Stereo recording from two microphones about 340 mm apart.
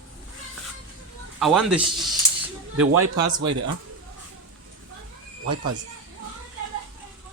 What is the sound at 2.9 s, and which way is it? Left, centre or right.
Speech, right.